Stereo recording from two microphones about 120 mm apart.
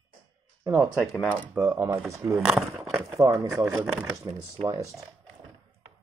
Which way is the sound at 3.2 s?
25° right (ahead or behind).